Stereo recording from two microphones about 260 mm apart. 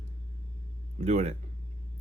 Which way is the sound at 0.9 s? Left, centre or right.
Right.